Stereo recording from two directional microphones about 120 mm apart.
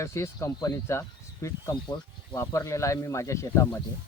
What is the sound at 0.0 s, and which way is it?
Speech, 25° left (ahead or behind).